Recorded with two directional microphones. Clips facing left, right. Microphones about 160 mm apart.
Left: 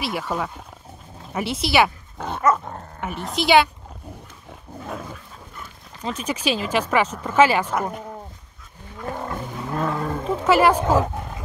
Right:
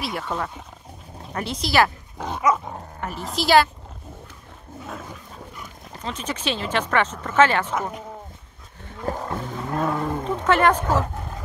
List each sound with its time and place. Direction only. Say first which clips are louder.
0.0 s a woman's voice: left 2 dB; 5° left (ahead or behind)
6.0 s speech: left 3 dB; 10° left (ahead or behind)
9.2 s roaring cats: even; centre (ahead or behind)
9.8 s a sound: right 1 dB; 20° right (ahead or behind)
10.4 s speech: left 2 dB; 10° left (ahead or behind)